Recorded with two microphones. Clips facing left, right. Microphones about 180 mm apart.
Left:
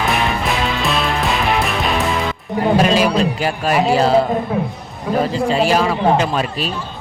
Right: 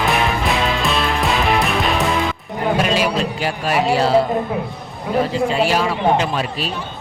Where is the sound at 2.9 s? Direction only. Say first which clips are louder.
Left 3 dB; 40° left (ahead or behind).